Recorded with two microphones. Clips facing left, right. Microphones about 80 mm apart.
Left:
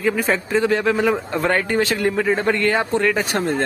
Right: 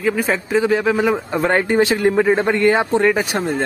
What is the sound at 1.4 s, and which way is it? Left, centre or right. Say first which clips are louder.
Speech: right 4 dB; centre.